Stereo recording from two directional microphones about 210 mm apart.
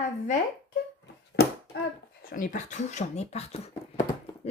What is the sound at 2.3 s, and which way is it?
Speech, 40° left (ahead or behind).